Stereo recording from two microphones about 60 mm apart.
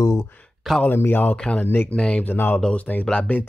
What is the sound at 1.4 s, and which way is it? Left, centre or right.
Speech, centre.